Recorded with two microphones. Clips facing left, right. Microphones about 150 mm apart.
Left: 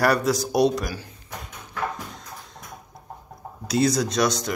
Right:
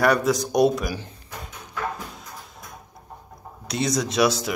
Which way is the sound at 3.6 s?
Centre (ahead or behind).